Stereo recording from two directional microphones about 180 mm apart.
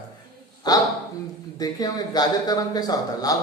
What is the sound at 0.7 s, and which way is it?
Speech, 20° left (ahead or behind).